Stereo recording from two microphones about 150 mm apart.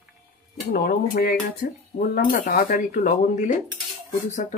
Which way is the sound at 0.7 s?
85° left.